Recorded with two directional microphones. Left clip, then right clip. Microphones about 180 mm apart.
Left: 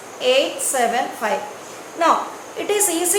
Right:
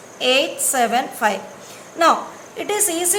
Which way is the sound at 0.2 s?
20° right (ahead or behind).